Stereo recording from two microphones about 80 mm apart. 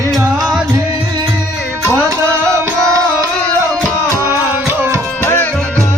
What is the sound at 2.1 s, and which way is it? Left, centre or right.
Music, right.